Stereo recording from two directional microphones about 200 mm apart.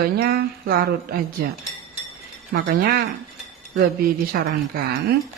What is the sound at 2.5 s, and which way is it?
A woman's voice, 50° right (ahead or behind).